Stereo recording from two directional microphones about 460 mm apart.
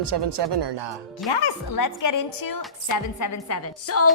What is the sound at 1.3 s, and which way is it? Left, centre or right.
A woman's voice, left.